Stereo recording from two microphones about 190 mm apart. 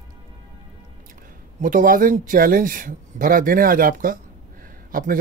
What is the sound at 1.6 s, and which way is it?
Speech, 45° right (ahead or behind).